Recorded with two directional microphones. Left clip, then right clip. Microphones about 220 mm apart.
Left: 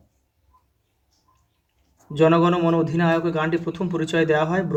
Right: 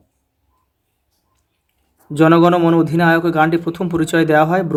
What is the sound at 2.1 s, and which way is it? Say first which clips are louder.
Speech: right 6 dB; 30° right (ahead or behind).